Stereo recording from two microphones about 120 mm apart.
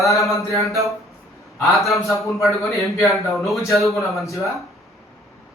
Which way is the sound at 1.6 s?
Centre (ahead or behind).